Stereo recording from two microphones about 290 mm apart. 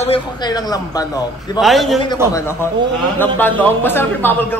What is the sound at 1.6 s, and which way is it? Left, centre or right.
Speech, centre.